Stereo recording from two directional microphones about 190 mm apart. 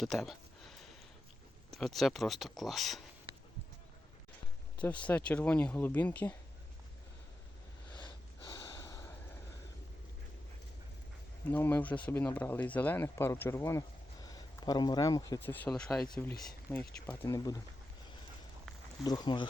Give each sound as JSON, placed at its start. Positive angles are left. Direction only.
{"t": 0.0, "sound": "a sound", "side_deg": 0}
{"t": 1.7, "sound": "speech", "side_deg": 0}
{"t": 4.8, "sound": "speech", "side_deg": 5}
{"t": 7.9, "sound": "snort", "side_deg": 25}
{"t": 11.4, "sound": "speech", "side_deg": 10}
{"t": 19.0, "sound": "speech", "side_deg": 20}